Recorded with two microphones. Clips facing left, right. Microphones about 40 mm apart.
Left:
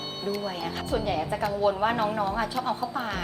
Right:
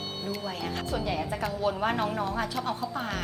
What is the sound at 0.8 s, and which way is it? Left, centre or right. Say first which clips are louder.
A woman's voice: left 4 dB; left.